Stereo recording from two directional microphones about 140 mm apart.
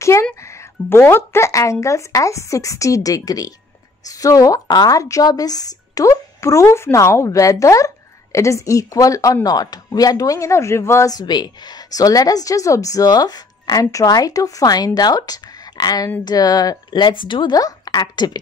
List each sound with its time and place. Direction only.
0.0 s music: 20° left (ahead or behind)
0.8 s a woman's voice: 15° left (ahead or behind)